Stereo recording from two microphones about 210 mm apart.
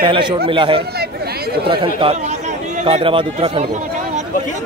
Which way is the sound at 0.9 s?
50° right (ahead or behind).